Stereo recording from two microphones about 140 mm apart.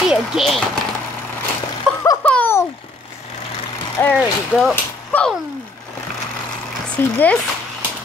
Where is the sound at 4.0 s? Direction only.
15° left (ahead or behind).